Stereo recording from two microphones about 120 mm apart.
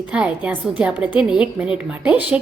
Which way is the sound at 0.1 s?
10° right (ahead or behind).